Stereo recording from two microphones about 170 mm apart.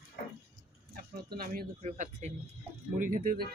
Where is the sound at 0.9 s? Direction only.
60° right (ahead or behind).